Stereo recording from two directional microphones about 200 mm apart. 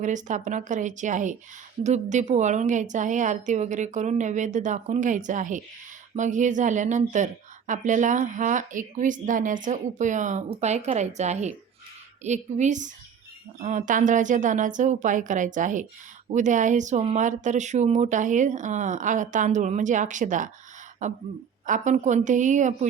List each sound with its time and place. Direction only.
0.0 s speech: 40° right (ahead or behind)